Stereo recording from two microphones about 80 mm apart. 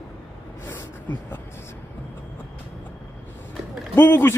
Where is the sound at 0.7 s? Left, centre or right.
Left.